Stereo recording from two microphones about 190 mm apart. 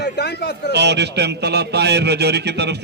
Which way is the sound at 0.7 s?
65° right (ahead or behind).